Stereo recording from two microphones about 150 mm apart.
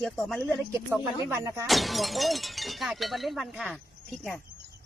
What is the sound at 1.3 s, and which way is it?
Speech, 20° right (ahead or behind).